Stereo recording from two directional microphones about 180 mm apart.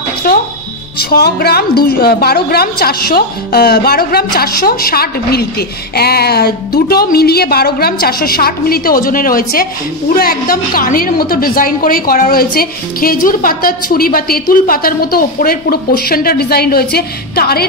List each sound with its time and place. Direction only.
0.3 s music: 55° left (ahead or behind)
0.9 s a woman's voice: 60° left (ahead or behind)